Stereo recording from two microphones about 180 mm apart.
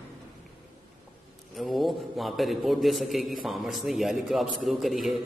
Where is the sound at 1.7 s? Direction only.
Centre (ahead or behind).